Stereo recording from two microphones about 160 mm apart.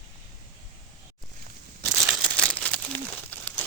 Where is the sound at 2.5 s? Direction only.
10° left (ahead or behind).